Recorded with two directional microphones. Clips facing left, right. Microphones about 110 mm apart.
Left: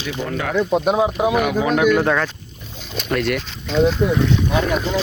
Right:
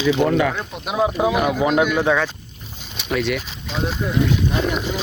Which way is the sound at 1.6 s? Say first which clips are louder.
Right 1 dB; 20° right (ahead or behind).